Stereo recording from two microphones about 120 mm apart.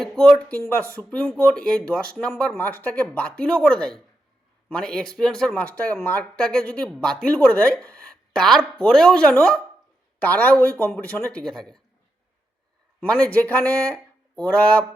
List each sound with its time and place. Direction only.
0.0 s speech: 5° left (ahead or behind)
0.6 s speech: 25° right (ahead or behind)
0.9 s speech: 5° left (ahead or behind)
13.0 s speech: 10° left (ahead or behind)